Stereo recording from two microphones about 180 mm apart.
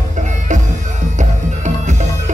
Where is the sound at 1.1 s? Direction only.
40° right (ahead or behind).